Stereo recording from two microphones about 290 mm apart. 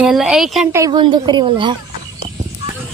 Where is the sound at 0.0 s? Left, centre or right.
Centre.